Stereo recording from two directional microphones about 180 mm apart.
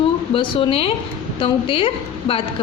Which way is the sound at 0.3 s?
30° left (ahead or behind).